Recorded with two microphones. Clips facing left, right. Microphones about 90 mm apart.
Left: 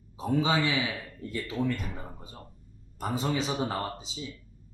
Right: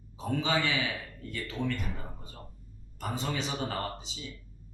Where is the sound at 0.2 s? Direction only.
10° left (ahead or behind).